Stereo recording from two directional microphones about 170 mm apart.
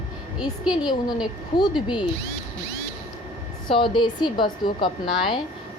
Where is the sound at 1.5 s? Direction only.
30° left (ahead or behind).